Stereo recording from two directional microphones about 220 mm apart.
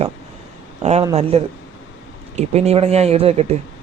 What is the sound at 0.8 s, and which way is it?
Speech, 30° right (ahead or behind).